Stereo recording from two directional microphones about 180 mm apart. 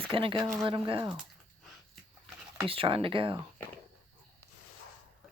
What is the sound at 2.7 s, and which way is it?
Speech, 30° right (ahead or behind).